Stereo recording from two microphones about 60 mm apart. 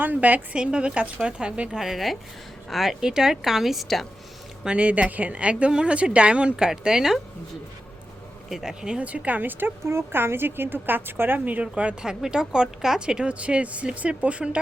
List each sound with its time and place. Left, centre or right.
0.0 s a woman's voice: right
1.8 s a woman's voice: centre
4.6 s a woman's voice: centre
8.4 s speech: centre
9.0 s a woman's voice: right
9.8 s a woman's voice: right; by 14.6 s centre